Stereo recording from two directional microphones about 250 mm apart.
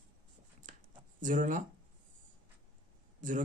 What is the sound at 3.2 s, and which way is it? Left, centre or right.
Speech, right.